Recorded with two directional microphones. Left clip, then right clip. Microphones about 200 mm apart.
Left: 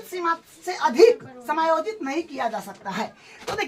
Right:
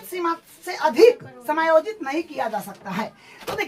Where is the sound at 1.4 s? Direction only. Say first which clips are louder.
Right 2 dB; 35° right (ahead or behind).